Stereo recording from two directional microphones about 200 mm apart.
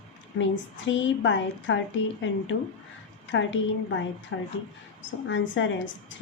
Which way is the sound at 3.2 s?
65° left (ahead or behind).